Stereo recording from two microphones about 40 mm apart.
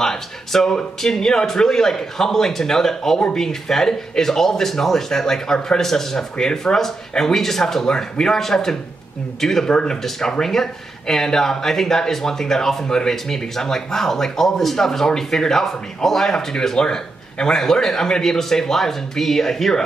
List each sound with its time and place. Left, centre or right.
0.0 s a sound: centre
0.7 s speech: centre
9.7 s speech: left
10.4 s speech: centre